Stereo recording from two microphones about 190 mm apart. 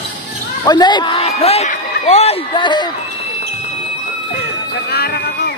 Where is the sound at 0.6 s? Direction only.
20° left (ahead or behind).